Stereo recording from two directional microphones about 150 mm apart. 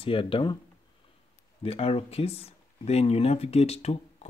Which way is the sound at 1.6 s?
40° left (ahead or behind).